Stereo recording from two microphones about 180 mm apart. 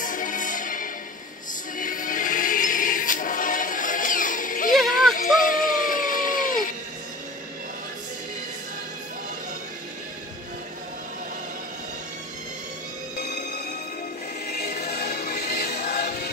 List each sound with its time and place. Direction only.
0.0 s music: 45° left (ahead or behind)
4.7 s music: centre (ahead or behind)
5.1 s a sound: 50° left (ahead or behind)
13.2 s music: 50° left (ahead or behind)
14.5 s choir: 60° left (ahead or behind)